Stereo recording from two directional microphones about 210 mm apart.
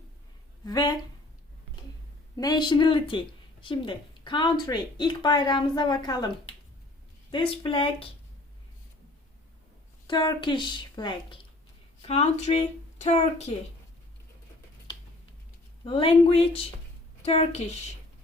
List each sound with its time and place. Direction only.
0.6 s a woman's voice: 20° left (ahead or behind)
2.3 s a woman's voice: 20° left (ahead or behind)
10.1 s a woman's voice: 20° left (ahead or behind)
15.8 s a woman's voice: 25° left (ahead or behind)